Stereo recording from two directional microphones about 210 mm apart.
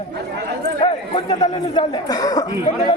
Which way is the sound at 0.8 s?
25° left (ahead or behind).